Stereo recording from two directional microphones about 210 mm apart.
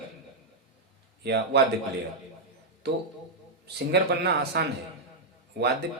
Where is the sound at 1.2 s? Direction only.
50° right (ahead or behind).